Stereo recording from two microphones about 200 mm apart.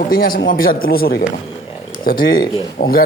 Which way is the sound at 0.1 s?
50° left (ahead or behind).